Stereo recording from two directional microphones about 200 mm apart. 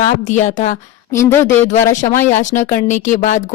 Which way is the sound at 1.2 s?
15° left (ahead or behind).